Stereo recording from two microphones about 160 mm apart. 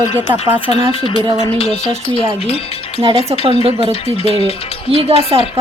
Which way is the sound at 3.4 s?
35° right (ahead or behind).